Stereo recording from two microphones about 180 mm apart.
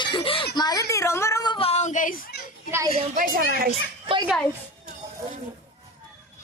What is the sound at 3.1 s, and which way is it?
Speech, 50° right (ahead or behind).